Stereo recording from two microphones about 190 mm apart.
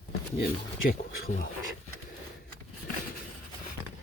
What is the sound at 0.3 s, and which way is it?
Speech, 55° left (ahead or behind).